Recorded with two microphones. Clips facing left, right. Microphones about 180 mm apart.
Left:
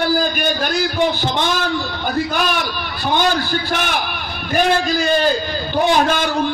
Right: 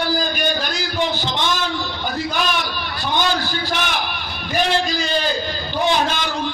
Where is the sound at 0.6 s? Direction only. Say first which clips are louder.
Left 5 dB; 55° left (ahead or behind).